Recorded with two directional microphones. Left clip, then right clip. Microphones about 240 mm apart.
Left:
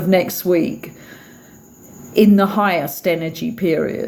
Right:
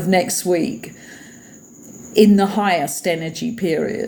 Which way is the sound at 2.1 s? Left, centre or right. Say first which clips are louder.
Even; left.